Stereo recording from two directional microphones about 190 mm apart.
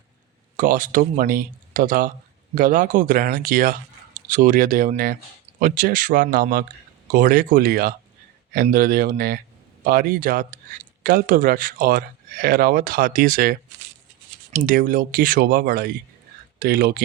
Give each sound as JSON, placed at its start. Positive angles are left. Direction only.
{"t": 0.5, "sound": "speech", "side_deg": -45}